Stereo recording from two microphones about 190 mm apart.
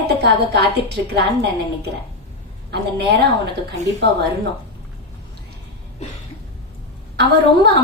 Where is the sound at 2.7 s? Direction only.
60° right (ahead or behind).